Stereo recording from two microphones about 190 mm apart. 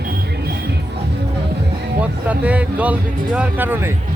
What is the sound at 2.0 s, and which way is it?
Speech, 5° right (ahead or behind).